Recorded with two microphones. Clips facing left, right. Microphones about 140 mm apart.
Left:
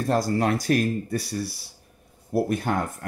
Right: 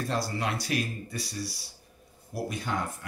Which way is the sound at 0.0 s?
50° left (ahead or behind).